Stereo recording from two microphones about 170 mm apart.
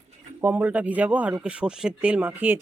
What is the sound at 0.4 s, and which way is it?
Speech, 10° right (ahead or behind).